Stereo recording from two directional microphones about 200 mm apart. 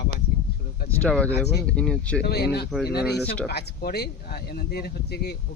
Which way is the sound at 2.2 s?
55° left (ahead or behind).